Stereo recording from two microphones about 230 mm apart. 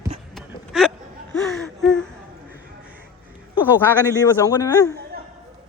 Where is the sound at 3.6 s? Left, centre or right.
Centre.